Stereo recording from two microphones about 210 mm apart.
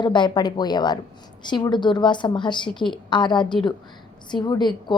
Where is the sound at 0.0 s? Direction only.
20° left (ahead or behind).